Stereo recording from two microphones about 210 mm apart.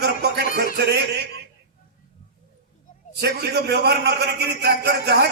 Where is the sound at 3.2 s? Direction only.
50° right (ahead or behind).